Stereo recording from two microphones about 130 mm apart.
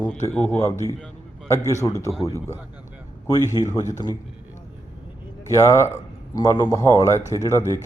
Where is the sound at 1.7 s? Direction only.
25° left (ahead or behind).